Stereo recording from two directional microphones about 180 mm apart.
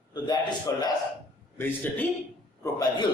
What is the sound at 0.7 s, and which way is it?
A man's voice, 20° left (ahead or behind).